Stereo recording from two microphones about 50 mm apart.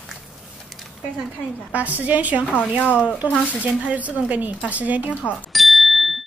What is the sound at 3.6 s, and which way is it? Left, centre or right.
Speech, right.